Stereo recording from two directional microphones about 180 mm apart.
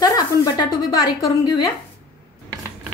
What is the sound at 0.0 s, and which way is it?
A woman's voice, 20° left (ahead or behind).